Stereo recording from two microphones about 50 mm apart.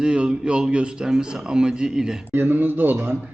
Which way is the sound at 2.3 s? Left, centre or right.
Right.